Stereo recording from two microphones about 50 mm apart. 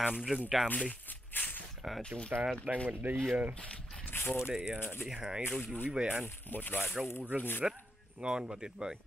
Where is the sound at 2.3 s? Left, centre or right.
Right.